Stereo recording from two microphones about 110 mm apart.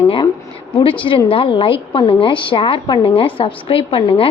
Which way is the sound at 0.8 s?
50° left (ahead or behind).